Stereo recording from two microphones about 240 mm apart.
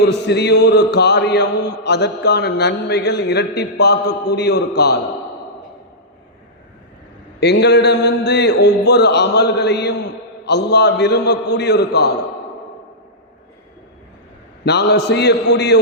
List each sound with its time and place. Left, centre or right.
0.1 s mantra: left
7.3 s mantra: left
14.6 s mantra: left